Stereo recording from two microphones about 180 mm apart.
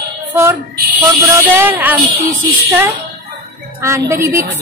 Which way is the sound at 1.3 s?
15° right (ahead or behind).